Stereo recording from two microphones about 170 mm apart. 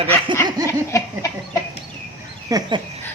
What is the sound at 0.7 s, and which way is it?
Speech, 15° left (ahead or behind).